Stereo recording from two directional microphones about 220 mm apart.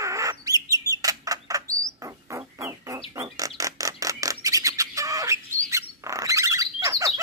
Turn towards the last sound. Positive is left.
turn(degrees=-15)  # may be behind; listen again after turning